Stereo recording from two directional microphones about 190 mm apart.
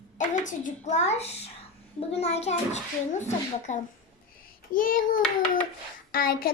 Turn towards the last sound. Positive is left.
turn(degrees=50)  # may be behind; listen again after turning